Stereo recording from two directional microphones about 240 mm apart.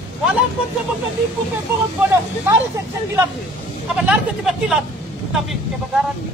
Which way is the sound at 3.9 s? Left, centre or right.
Centre.